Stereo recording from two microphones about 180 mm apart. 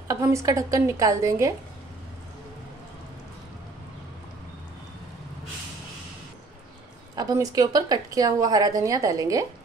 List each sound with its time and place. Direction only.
0.1 s a woman's voice: 15° right (ahead or behind)
7.2 s a woman's voice: 20° right (ahead or behind)